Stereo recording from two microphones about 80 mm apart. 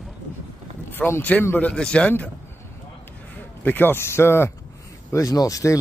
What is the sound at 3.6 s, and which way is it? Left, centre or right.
Speech, left.